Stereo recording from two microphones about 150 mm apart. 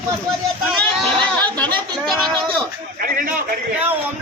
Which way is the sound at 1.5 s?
10° left (ahead or behind).